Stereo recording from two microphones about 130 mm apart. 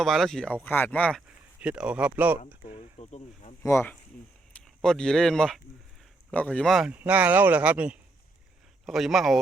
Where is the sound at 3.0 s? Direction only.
55° left (ahead or behind).